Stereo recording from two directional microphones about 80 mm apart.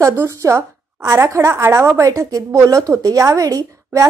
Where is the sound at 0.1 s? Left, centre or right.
Right.